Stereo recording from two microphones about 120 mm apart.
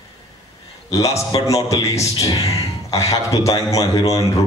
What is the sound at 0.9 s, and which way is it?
A man's voice, 25° left (ahead or behind).